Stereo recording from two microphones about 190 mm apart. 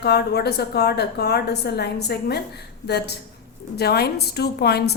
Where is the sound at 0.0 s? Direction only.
60° left (ahead or behind).